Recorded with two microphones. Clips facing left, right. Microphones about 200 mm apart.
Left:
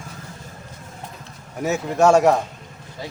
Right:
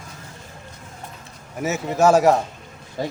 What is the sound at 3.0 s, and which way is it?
Speech, 45° right (ahead or behind).